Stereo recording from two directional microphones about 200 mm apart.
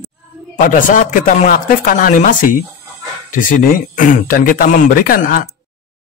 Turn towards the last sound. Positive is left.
turn(degrees=45)  # may be behind; listen again after turning